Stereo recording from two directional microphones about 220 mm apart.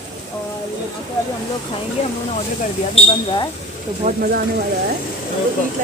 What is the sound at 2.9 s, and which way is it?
Speech, 20° left (ahead or behind).